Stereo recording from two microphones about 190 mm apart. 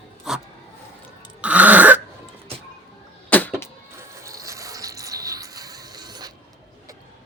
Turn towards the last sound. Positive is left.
turn(degrees=-20)  # may be behind; listen again after turning